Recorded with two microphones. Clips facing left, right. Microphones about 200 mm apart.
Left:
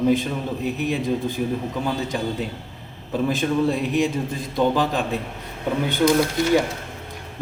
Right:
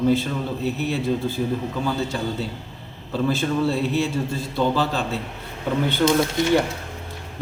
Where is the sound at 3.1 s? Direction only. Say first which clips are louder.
Left 1 dB; 15° left (ahead or behind).